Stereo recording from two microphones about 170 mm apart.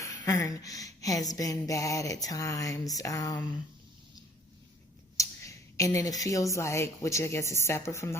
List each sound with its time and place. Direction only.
0.0 s speech: 20° left (ahead or behind)
5.1 s speech: 20° left (ahead or behind)